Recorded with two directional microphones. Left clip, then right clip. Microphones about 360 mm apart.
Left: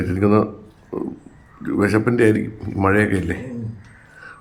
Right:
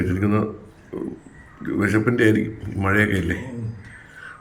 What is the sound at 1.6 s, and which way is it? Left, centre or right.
A man's voice, centre.